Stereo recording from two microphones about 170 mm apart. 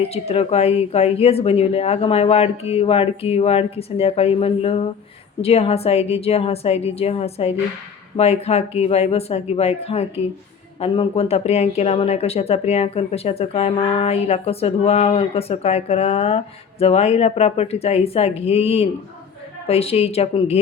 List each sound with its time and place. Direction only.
0.1 s speech: 35° left (ahead or behind)